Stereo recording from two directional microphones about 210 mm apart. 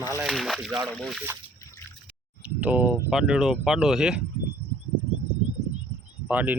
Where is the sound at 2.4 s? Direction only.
5° right (ahead or behind).